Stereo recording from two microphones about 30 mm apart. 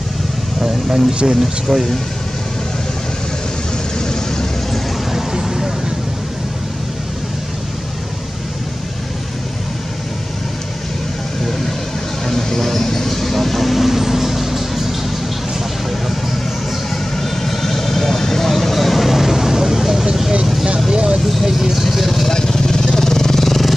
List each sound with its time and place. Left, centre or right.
0.6 s speech: centre
4.0 s vehicle: centre
5.1 s vehicle: centre
12.3 s vehicle: centre
17.2 s vehicle: centre
20.9 s vehicle: right
21.5 s vehicle: centre
21.9 s vehicle: centre
22.3 s vehicle: centre